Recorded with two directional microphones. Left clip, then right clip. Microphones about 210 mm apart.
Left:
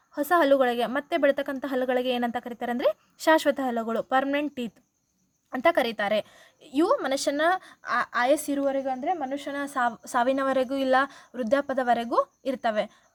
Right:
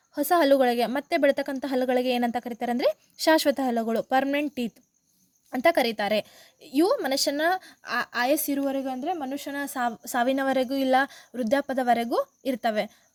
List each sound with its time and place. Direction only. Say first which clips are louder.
0.1 s a woman's voice: even; 40° right (ahead or behind)